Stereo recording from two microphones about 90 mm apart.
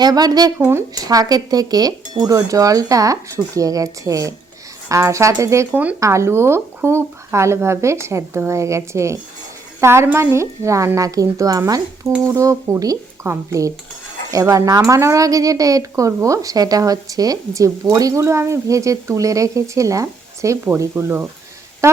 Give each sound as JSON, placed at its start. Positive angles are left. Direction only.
{"t": 0.0, "sound": "speech", "side_deg": -45}
{"t": 0.6, "sound": "speech", "side_deg": -25}
{"t": 0.9, "sound": "a woman's voice", "side_deg": -45}
{"t": 5.7, "sound": "speech", "side_deg": -15}
{"t": 6.0, "sound": "a woman's voice", "side_deg": -35}